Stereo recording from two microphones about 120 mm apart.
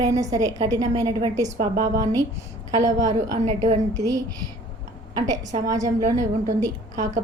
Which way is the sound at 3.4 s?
70° right (ahead or behind).